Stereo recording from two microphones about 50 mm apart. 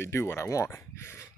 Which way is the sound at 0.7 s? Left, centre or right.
Left.